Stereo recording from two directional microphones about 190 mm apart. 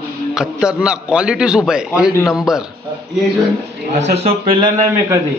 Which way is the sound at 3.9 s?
35° right (ahead or behind).